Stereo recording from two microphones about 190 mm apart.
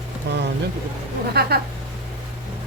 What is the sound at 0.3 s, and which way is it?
Speech, 60° right (ahead or behind).